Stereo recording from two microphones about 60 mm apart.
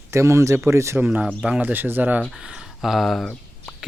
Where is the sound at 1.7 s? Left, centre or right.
Right.